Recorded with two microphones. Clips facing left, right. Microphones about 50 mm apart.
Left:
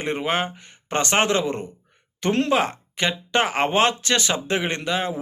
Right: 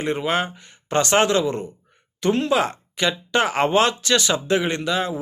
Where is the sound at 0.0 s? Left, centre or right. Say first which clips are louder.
Right 1 dB; left.